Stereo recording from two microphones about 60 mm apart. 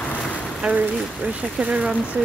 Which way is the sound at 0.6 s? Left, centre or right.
Centre.